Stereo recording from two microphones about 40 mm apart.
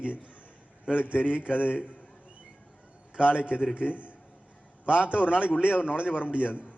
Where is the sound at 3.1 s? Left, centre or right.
Right.